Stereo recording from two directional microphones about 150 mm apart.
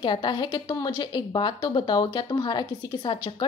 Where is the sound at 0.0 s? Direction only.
30° left (ahead or behind).